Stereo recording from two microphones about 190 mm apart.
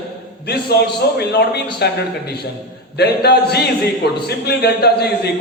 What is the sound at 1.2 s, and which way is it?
Speech, 60° left (ahead or behind).